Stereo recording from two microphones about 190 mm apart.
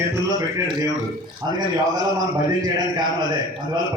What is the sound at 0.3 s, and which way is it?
A man's voice, 20° right (ahead or behind).